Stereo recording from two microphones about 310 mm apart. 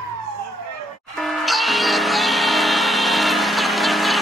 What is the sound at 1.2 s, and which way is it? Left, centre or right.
Music, centre.